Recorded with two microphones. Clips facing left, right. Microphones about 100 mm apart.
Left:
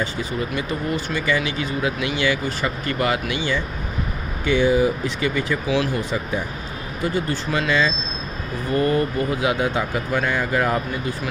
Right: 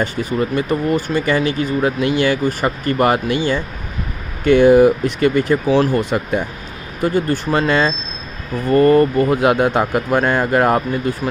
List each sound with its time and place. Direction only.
0.0 s speech: 55° right (ahead or behind)
6.0 s speech: 60° right (ahead or behind)
7.0 s speech: 50° right (ahead or behind)